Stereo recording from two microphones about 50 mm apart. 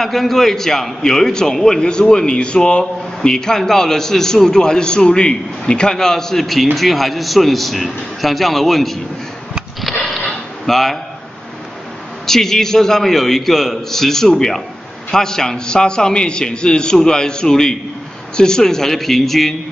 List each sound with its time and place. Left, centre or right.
0.0 s a man's voice: centre
9.8 s sniff: centre
10.7 s speech: centre
12.3 s a man's voice: centre